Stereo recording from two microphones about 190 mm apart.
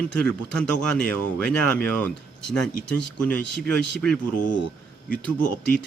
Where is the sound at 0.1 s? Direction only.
5° left (ahead or behind).